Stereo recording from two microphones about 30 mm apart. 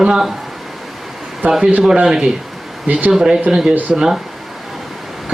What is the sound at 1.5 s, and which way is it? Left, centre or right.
Speech, right.